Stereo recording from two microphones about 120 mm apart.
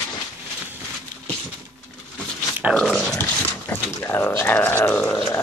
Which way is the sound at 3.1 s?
20° left (ahead or behind).